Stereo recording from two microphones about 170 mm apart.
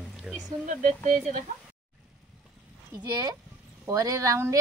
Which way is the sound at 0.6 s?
50° right (ahead or behind).